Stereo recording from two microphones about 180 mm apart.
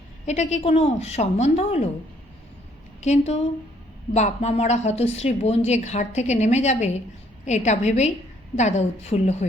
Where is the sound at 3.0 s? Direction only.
40° left (ahead or behind).